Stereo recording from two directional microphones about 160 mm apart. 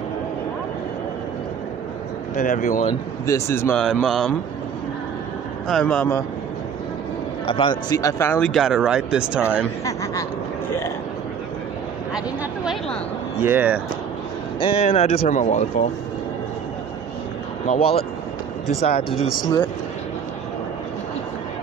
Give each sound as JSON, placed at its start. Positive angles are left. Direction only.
{"t": 2.3, "sound": "speech", "side_deg": 55}
{"t": 2.9, "sound": "speech", "side_deg": 20}
{"t": 3.7, "sound": "speech", "side_deg": 0}
{"t": 5.7, "sound": "speech", "side_deg": 5}
{"t": 7.4, "sound": "a man's voice", "side_deg": 35}
{"t": 7.9, "sound": "speech", "side_deg": 20}
{"t": 13.4, "sound": "speech", "side_deg": -10}
{"t": 14.6, "sound": "speech", "side_deg": 40}
{"t": 17.6, "sound": "speech", "side_deg": 40}